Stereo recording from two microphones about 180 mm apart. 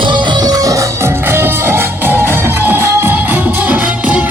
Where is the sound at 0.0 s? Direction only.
25° right (ahead or behind).